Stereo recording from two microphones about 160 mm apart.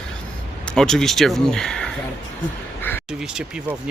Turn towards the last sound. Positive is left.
turn(degrees=-5)  # may be behind; listen again after turning